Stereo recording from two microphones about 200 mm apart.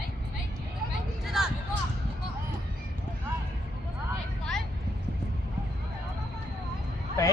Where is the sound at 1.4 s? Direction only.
Centre (ahead or behind).